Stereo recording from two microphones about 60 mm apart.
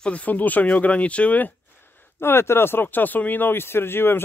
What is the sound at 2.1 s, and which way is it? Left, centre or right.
Speech, left.